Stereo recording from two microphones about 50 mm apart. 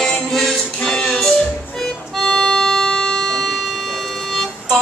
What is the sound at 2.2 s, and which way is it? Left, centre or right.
Music, centre.